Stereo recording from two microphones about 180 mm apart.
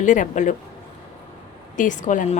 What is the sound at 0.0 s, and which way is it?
Speech, 45° left (ahead or behind).